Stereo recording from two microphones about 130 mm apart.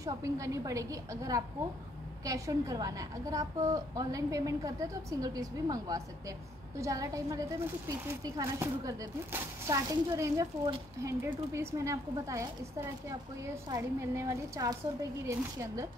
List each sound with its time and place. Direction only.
0.0 s a woman's voice: 25° right (ahead or behind)